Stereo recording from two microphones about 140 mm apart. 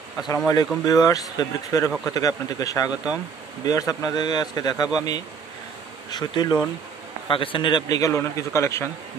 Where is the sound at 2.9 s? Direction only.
10° right (ahead or behind).